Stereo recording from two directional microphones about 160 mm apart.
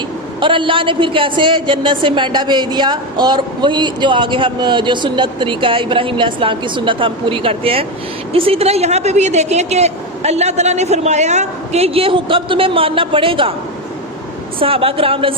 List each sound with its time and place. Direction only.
0.3 s a woman's voice: 30° right (ahead or behind)
14.6 s a woman's voice: 35° right (ahead or behind)